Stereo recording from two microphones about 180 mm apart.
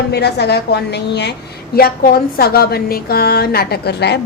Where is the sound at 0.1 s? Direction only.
65° left (ahead or behind).